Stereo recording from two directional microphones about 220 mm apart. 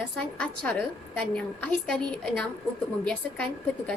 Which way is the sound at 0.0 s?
5° left (ahead or behind).